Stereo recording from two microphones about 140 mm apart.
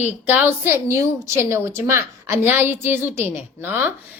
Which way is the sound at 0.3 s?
15° right (ahead or behind).